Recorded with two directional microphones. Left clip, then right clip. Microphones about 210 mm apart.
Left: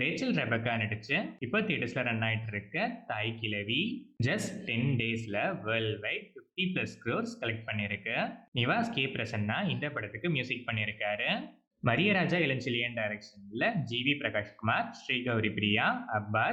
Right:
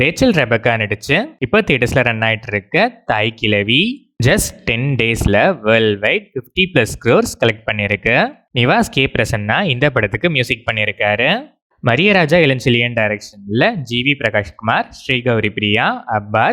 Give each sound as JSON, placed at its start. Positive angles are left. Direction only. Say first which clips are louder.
{"t": 0.0, "sound": "speech", "louder": "right 18 dB", "side_deg": -50}